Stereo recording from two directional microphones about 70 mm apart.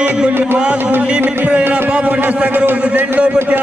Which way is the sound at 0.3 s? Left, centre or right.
Right.